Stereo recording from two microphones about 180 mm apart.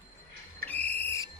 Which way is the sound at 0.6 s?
10° left (ahead or behind).